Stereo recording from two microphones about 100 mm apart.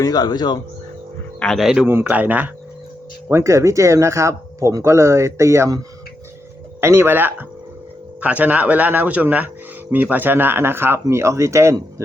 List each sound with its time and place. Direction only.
0.0 s speech: 40° left (ahead or behind)
1.4 s speech: centre (ahead or behind)
1.9 s speech: 20° right (ahead or behind)
3.2 s speech: 30° right (ahead or behind)
6.8 s speech: 25° right (ahead or behind)